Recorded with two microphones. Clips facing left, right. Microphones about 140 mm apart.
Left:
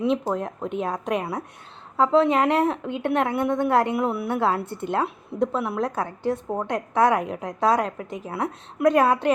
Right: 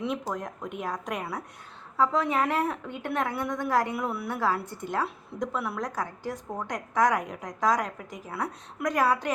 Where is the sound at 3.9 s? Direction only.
25° left (ahead or behind).